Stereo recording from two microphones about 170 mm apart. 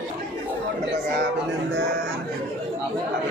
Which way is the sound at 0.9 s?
75° right (ahead or behind).